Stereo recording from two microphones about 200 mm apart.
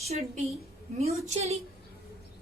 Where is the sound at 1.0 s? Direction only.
30° right (ahead or behind).